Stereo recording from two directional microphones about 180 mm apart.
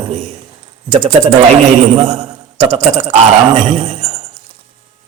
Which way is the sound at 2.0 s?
30° right (ahead or behind).